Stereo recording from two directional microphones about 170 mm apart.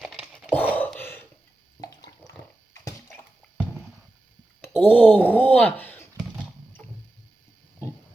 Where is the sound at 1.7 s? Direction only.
20° left (ahead or behind).